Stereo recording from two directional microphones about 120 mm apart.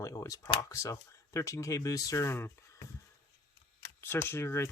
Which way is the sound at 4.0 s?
20° left (ahead or behind).